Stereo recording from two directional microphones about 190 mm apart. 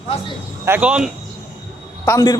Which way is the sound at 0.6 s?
10° right (ahead or behind).